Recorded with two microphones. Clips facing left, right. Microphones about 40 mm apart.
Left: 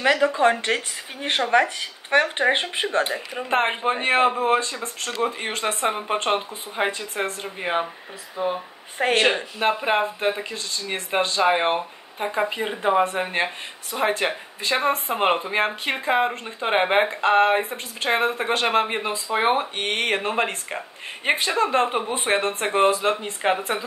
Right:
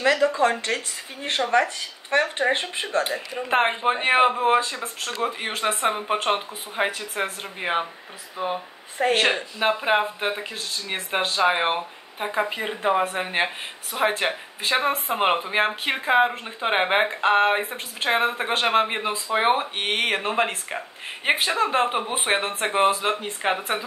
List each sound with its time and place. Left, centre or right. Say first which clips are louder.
0.0 s speech: left 1 dB; left
3.0 s speech: right 2 dB; centre
3.4 s speech: right 1 dB; centre
7.6 s speech: even; right
8.9 s speech: even; left
9.3 s speech: left 1 dB; centre
22.0 s speech: left 1 dB; right
22.7 s speech: left 1 dB; centre